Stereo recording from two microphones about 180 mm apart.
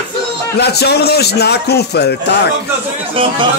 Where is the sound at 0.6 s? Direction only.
65° left (ahead or behind).